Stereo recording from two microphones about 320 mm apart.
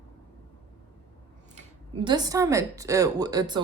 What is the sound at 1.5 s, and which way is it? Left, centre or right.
Speech, centre.